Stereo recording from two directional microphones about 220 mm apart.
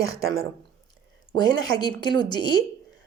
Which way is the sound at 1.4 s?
20° left (ahead or behind).